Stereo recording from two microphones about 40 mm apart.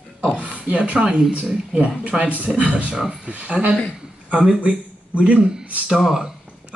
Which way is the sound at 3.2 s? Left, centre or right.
Right.